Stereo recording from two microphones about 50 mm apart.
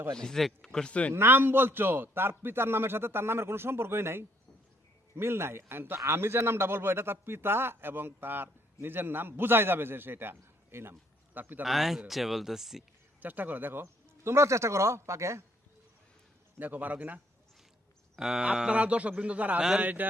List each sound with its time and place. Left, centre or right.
0.2 s speech: centre
0.9 s speech: left
1.1 s a man's voice: right
10.4 s a sound: right
11.3 s speech: right
11.6 s speech: centre
13.1 s speech: right
13.8 s speech: right
16.6 s speech: right
18.2 s a sound: centre
18.7 s a man's voice: right
19.8 s speech: right